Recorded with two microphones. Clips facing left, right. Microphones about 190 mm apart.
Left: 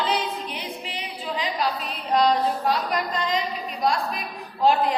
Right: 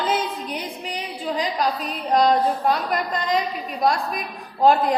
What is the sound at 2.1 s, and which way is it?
Speech, 45° right (ahead or behind).